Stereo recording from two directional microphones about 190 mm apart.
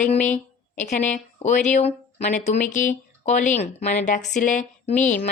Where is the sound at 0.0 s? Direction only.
35° left (ahead or behind).